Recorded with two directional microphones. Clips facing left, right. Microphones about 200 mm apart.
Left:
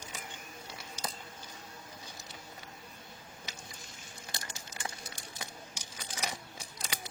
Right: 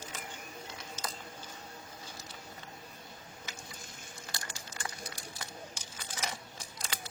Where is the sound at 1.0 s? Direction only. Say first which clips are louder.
Left 1 dB; 10° left (ahead or behind).